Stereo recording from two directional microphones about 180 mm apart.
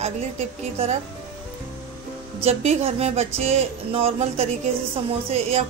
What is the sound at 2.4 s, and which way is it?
Music, 35° right (ahead or behind).